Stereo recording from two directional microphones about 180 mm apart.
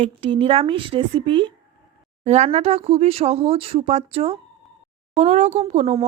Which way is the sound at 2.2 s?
40° right (ahead or behind).